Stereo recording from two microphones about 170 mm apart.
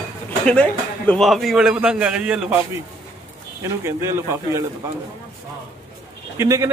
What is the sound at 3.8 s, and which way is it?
Speech, 15° right (ahead or behind).